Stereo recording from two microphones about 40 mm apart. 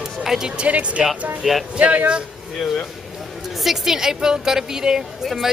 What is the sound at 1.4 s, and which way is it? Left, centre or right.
Speech, centre.